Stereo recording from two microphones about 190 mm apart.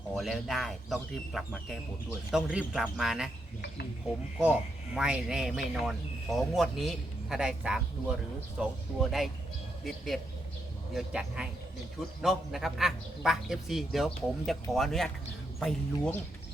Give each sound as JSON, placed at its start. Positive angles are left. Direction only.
{"t": 0.1, "sound": "a man's voice", "side_deg": 0}
{"t": 4.9, "sound": "a man's voice", "side_deg": -5}